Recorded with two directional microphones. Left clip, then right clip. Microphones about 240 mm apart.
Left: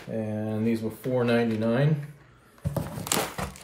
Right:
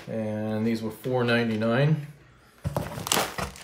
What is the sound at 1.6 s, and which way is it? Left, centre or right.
Speech, right.